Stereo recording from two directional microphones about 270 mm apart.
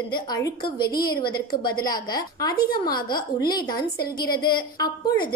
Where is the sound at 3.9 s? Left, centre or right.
Left.